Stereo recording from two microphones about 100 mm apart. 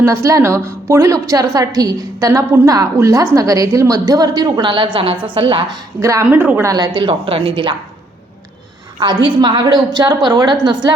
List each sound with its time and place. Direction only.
0.0 s a woman's voice: 30° right (ahead or behind); by 5.6 s 60° right (ahead or behind)
6.0 s a woman's voice: 30° right (ahead or behind)
6.2 s a woman's voice: 15° right (ahead or behind)
6.7 s a woman's voice: 40° right (ahead or behind)
7.1 s a woman's voice: 65° right (ahead or behind)
9.0 s a woman's voice: 50° right (ahead or behind)